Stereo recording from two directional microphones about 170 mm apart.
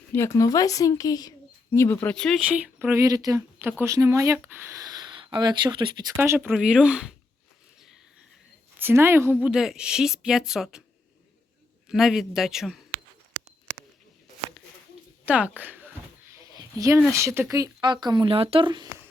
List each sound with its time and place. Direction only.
0.1 s speech: 15° left (ahead or behind)
2.5 s speech: 10° right (ahead or behind); by 6.1 s 30° right (ahead or behind)
6.1 s speech: 15° right (ahead or behind)
8.8 s speech: 15° right (ahead or behind)
11.9 s speech: centre (ahead or behind)
15.2 s speech: 10° right (ahead or behind)
16.3 s a sound: 20° right (ahead or behind)
17.1 s speech: 15° right (ahead or behind)